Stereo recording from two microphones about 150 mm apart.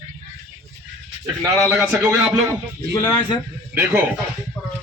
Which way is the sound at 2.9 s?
20° left (ahead or behind).